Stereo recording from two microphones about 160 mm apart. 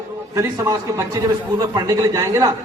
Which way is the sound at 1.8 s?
20° right (ahead or behind).